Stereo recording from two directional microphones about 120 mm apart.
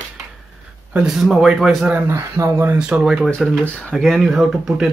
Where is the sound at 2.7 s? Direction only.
5° right (ahead or behind).